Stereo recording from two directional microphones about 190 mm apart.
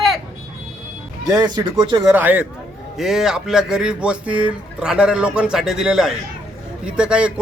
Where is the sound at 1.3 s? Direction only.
20° right (ahead or behind).